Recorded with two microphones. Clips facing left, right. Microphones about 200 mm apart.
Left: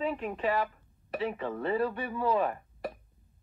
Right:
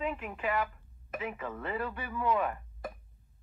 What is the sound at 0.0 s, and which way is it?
Speech, 30° left (ahead or behind).